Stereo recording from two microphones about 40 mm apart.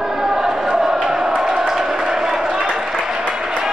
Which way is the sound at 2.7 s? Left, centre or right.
Centre.